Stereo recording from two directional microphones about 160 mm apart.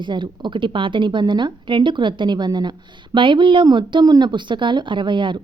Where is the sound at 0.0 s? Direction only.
30° right (ahead or behind).